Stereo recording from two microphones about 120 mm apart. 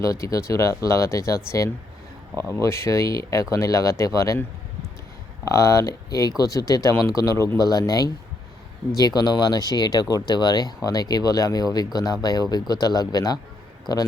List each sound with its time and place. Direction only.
0.0 s speech: 25° left (ahead or behind)
2.3 s speech: 25° right (ahead or behind)
2.6 s speech: 20° left (ahead or behind)
5.5 s speech: 25° left (ahead or behind)